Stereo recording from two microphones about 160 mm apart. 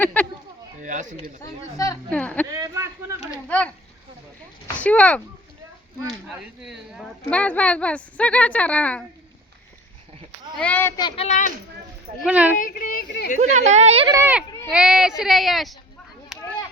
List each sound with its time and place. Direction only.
0.0 s a sound: 10° left (ahead or behind)
0.8 s speech: 50° right (ahead or behind)
2.0 s speech: 10° left (ahead or behind)
2.5 s speech: 20° right (ahead or behind)
4.8 s speech: 10° left (ahead or behind)
6.2 s speech: centre (ahead or behind)
10.6 s speech: 10° left (ahead or behind)
11.2 s speech: 50° left (ahead or behind)
12.2 s speech: 10° right (ahead or behind)
12.5 s speech: 60° left (ahead or behind)
13.4 s speech: 50° right (ahead or behind)
14.1 s speech: 15° right (ahead or behind)
16.3 s children playing: 5° right (ahead or behind)